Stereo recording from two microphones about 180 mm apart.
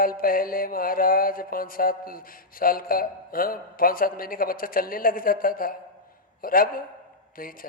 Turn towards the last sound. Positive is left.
turn(degrees=50)  # may be behind; listen again after turning